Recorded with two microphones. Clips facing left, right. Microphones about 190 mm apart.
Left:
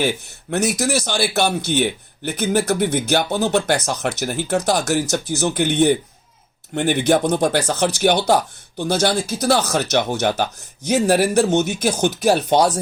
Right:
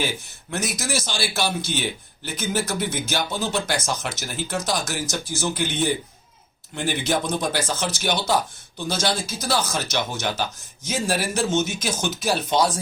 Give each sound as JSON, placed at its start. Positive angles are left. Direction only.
{"t": 0.5, "sound": "speech", "side_deg": 65}